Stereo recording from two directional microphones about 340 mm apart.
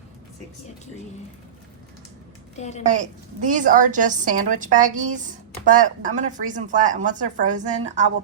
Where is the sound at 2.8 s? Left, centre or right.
Right.